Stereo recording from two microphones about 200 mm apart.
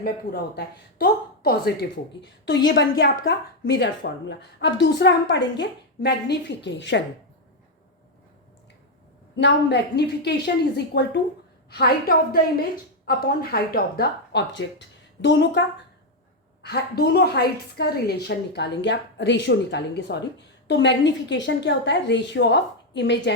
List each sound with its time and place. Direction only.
0.0 s a woman's voice: 50° left (ahead or behind)
9.3 s a woman's voice: 60° left (ahead or behind)
16.6 s a woman's voice: 55° left (ahead or behind)